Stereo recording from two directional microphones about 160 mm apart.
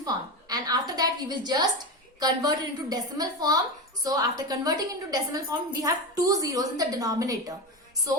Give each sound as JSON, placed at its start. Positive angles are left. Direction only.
{"t": 0.0, "sound": "a woman's voice", "side_deg": -25}